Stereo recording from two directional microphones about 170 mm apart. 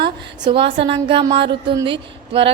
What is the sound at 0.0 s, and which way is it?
A woman's voice, 30° right (ahead or behind).